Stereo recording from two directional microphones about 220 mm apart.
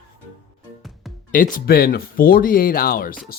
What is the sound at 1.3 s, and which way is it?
Speech, 40° left (ahead or behind).